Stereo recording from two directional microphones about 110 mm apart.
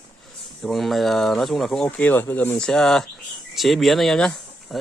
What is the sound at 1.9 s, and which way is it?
Speech, 15° left (ahead or behind).